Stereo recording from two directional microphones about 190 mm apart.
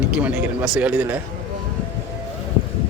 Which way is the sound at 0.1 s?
5° right (ahead or behind).